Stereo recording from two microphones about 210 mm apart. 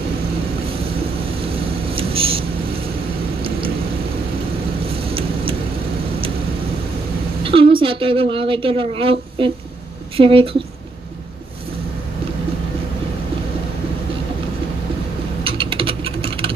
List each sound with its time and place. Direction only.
1.6 s vehicle: 25° right (ahead or behind)
5.0 s vehicle: 25° right (ahead or behind)
7.4 s a sound: 25° right (ahead or behind)
7.8 s a woman's voice: 25° right (ahead or behind)
15.4 s typing: 25° right (ahead or behind)